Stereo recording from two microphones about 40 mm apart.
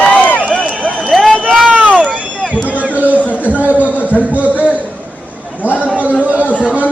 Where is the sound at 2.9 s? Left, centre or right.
Right.